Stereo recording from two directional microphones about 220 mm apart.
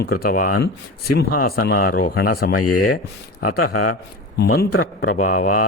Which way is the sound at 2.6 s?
90° left.